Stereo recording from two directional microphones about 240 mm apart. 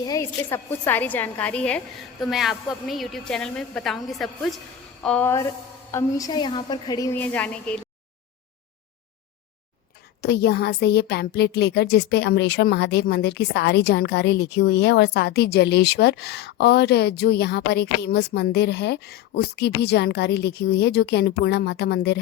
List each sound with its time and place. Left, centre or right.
0.0 s a woman's voice: centre
10.2 s speech: left